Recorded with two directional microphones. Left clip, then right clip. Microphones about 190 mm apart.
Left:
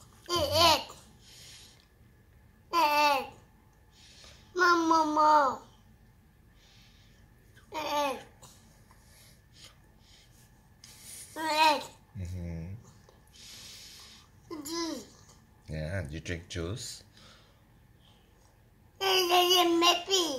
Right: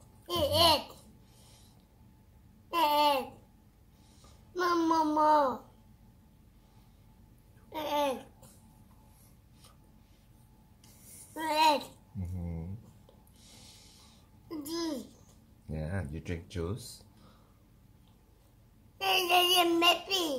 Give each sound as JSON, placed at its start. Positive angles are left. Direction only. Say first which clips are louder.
{"t": 0.3, "sound": "babbling", "louder": "left 1 dB", "side_deg": -10}
{"t": 2.7, "sound": "babbling", "louder": "left 2 dB", "side_deg": -10}
{"t": 4.1, "sound": "a sound", "louder": "left 4 dB", "side_deg": -15}
{"t": 7.7, "sound": "babbling", "louder": "even", "side_deg": -10}
{"t": 11.3, "sound": "babbling", "louder": "left 1 dB", "side_deg": -15}
{"t": 13.4, "sound": "babbling", "louder": "left 9 dB", "side_deg": -20}
{"t": 15.6, "sound": "a sound", "louder": "left 2 dB", "side_deg": -10}
{"t": 18.9, "sound": "babbling", "louder": "left 1 dB", "side_deg": -10}